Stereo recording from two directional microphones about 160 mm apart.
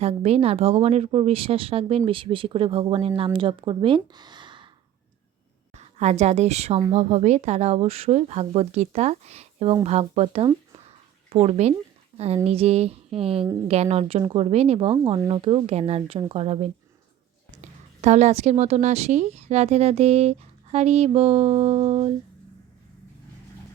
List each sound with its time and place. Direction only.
0.0 s speech: 40° right (ahead or behind)
5.7 s a woman's voice: 45° right (ahead or behind)